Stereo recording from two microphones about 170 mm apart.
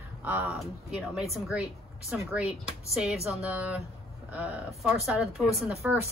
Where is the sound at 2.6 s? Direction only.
5° right (ahead or behind).